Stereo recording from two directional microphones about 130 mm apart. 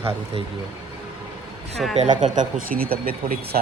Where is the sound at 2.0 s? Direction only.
70° right (ahead or behind).